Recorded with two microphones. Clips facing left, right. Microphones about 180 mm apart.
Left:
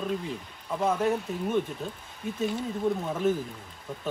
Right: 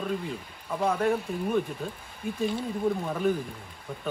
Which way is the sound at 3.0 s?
Centre (ahead or behind).